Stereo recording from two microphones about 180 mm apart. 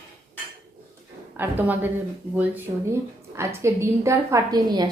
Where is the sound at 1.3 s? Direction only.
10° right (ahead or behind).